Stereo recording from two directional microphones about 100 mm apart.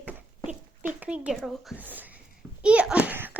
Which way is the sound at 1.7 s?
15° right (ahead or behind).